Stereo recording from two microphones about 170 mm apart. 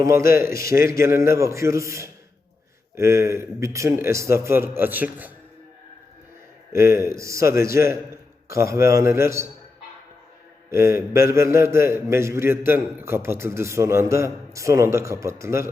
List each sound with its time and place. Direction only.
0.0 s a man's voice: 15° right (ahead or behind)
6.7 s a man's voice: 15° right (ahead or behind)
10.7 s a man's voice: 15° right (ahead or behind)